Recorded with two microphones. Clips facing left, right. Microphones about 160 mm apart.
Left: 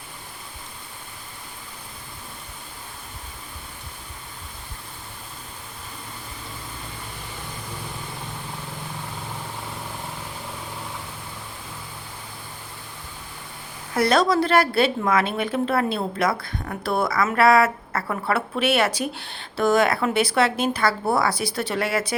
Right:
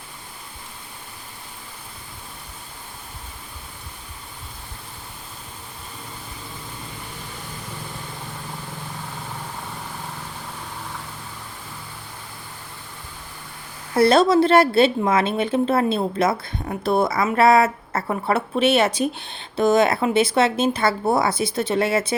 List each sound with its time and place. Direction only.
13.9 s a woman's voice: 30° right (ahead or behind)